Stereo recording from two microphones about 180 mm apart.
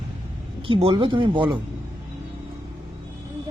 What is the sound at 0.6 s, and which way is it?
Speech, 30° right (ahead or behind).